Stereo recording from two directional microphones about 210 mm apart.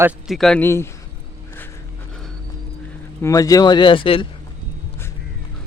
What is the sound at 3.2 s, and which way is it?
Speech, 15° left (ahead or behind).